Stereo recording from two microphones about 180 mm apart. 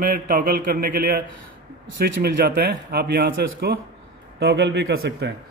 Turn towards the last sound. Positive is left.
turn(degrees=-65)  # may be behind; listen again after turning